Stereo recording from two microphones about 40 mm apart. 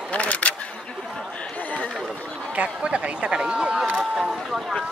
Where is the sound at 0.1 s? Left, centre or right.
Left.